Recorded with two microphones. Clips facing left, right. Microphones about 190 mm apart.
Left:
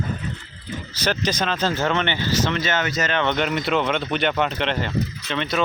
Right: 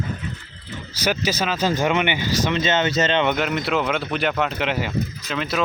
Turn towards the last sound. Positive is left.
turn(degrees=0)  # may be behind; listen again after turning